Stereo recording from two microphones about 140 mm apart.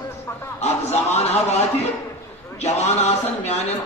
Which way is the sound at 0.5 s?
50° left (ahead or behind).